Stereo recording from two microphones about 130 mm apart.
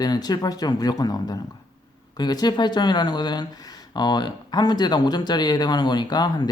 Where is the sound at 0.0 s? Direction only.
30° left (ahead or behind).